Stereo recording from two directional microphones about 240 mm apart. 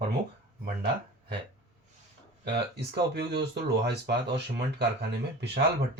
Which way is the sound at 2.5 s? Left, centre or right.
Right.